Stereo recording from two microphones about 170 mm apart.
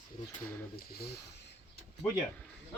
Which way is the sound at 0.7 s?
65° left (ahead or behind).